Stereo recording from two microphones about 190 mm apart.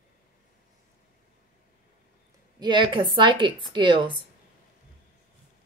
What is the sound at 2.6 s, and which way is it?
Speech, 25° right (ahead or behind).